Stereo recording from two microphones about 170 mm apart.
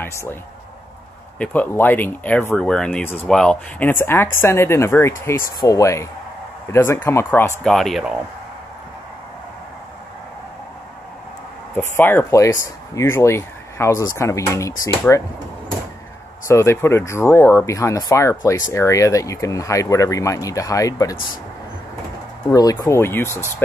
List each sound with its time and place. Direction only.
0.0 s speech: 15° left (ahead or behind)
1.4 s speech: 10° left (ahead or behind)
11.7 s speech: 10° left (ahead or behind)
16.4 s speech: 15° left (ahead or behind)
22.5 s speech: 20° left (ahead or behind)